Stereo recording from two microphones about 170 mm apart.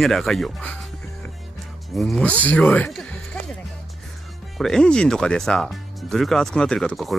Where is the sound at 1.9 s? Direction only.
Centre (ahead or behind).